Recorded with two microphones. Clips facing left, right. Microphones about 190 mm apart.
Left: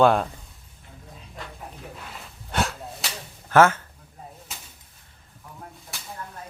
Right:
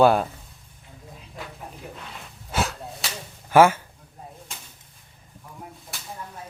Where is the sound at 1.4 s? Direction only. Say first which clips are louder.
Right 1 dB; centre (ahead or behind).